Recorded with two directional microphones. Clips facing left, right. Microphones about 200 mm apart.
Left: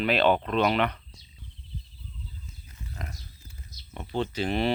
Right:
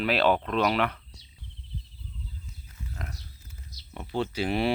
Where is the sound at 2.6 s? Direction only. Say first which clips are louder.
Even; 5° left (ahead or behind).